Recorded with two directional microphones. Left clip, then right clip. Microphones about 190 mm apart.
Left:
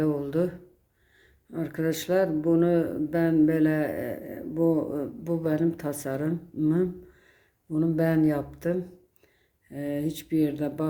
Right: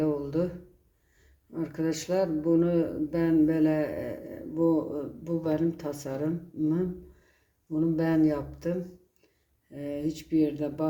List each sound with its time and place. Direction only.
0.0 s speech: 30° left (ahead or behind)
1.5 s speech: 30° left (ahead or behind)
9.7 s speech: 35° left (ahead or behind)